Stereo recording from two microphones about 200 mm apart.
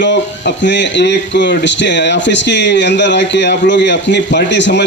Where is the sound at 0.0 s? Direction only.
60° left (ahead or behind).